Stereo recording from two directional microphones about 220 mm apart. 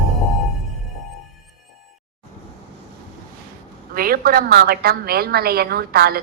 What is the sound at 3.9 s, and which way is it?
A woman's voice, 40° right (ahead or behind).